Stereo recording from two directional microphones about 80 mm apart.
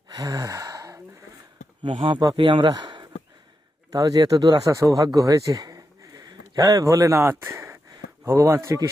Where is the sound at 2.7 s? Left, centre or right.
Right.